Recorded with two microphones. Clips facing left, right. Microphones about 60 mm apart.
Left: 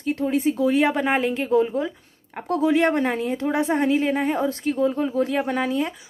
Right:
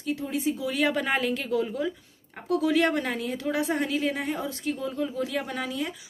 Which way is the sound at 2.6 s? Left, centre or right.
Left.